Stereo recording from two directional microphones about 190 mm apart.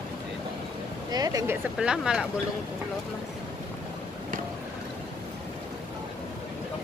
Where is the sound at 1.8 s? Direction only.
5° right (ahead or behind).